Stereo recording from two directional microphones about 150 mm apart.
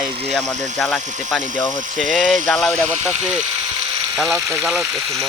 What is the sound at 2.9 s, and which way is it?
Speech, 50° right (ahead or behind).